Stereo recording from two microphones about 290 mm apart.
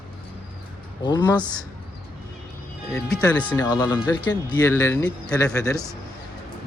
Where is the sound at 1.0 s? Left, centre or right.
Centre.